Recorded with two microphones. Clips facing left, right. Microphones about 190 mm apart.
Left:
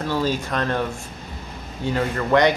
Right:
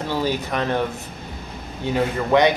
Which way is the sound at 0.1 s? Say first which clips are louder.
Even; 20° right (ahead or behind).